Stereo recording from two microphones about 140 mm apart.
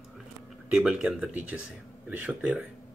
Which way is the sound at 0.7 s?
5° right (ahead or behind).